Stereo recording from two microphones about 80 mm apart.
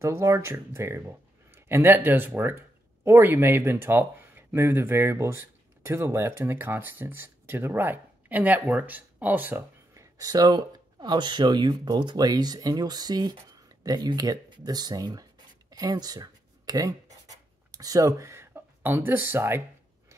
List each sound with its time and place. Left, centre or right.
0.0 s speech: right
9.9 s speech: right